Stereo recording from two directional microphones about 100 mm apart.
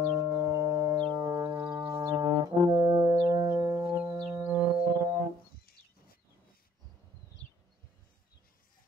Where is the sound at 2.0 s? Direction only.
40° right (ahead or behind).